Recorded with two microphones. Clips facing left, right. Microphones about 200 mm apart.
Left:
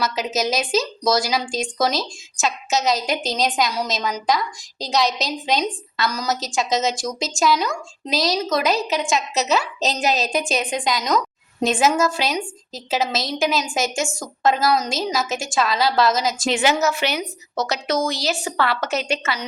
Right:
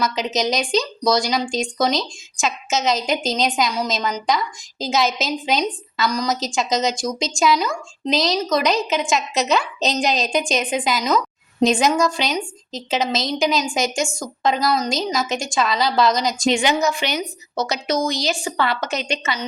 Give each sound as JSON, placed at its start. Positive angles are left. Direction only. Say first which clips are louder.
{"t": 0.0, "sound": "speech", "louder": "right 1 dB", "side_deg": 5}